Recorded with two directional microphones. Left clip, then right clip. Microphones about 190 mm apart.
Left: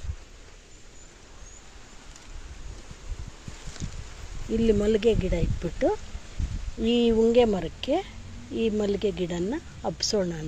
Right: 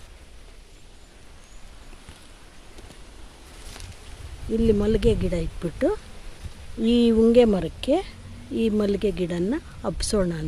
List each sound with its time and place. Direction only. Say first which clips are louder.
4.6 s speech: right 1 dB; 15° right (ahead or behind)